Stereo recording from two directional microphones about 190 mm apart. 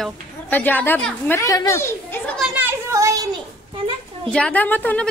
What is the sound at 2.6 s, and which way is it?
Children playing, 15° right (ahead or behind).